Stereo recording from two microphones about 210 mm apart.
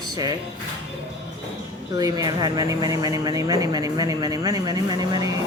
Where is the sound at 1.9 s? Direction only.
15° right (ahead or behind).